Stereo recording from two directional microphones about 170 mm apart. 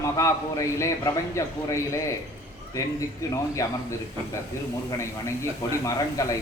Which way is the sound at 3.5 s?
20° left (ahead or behind).